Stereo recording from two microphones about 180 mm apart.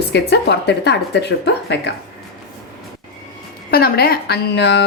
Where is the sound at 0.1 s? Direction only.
70° left (ahead or behind).